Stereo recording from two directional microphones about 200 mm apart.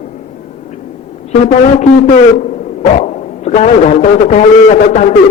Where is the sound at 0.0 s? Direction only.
35° left (ahead or behind).